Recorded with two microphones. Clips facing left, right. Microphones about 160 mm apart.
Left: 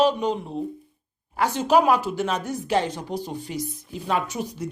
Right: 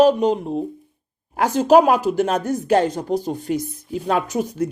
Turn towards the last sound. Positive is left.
turn(degrees=-50)  # may be behind; listen again after turning